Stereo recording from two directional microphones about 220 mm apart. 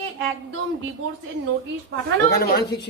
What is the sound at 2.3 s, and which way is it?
Speech, 45° left (ahead or behind).